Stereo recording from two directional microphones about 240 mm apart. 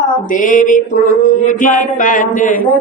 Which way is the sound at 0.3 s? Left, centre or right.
Left.